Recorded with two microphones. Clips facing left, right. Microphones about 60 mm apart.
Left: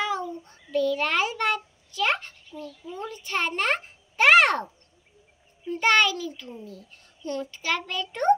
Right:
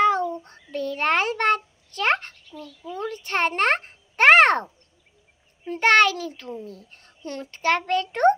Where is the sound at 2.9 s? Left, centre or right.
Right.